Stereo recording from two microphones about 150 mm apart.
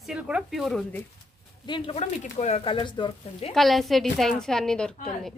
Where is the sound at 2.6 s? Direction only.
35° left (ahead or behind).